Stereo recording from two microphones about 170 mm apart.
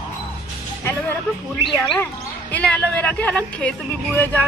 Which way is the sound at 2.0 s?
10° left (ahead or behind).